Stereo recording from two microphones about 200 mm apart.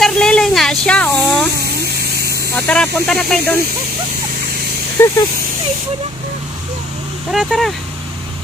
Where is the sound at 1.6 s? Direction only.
55° right (ahead or behind).